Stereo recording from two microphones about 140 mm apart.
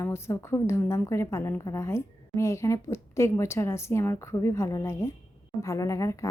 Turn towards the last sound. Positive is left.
turn(degrees=20)  # may be behind; listen again after turning